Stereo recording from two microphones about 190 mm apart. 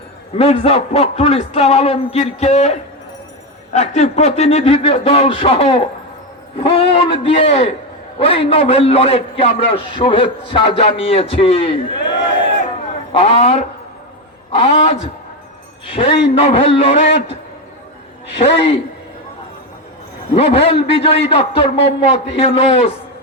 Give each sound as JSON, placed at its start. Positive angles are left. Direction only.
{"t": 0.3, "sound": "a man's voice", "side_deg": 30}
{"t": 13.1, "sound": "a man's voice", "side_deg": 35}
{"t": 18.3, "sound": "a man's voice", "side_deg": 30}
{"t": 20.3, "sound": "a man's voice", "side_deg": 30}